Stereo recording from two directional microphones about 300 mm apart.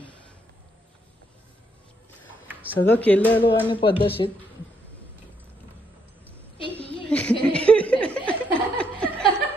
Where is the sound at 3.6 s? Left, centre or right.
Centre.